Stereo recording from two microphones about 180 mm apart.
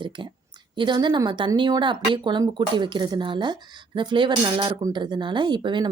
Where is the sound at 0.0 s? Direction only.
25° right (ahead or behind).